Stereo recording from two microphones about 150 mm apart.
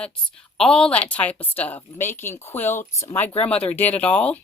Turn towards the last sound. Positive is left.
turn(degrees=10)  # may be behind; listen again after turning